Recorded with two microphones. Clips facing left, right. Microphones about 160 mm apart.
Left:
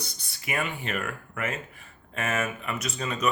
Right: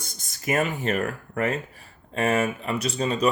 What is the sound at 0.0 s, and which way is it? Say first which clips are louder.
Speech: right 7 dB; 45° right (ahead or behind).